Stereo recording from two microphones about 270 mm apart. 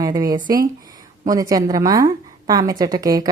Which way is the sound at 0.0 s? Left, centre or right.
Centre.